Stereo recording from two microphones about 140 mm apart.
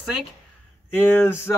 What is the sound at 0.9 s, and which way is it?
Speech, 15° left (ahead or behind).